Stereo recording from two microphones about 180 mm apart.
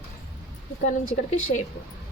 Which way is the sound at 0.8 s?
45° left (ahead or behind).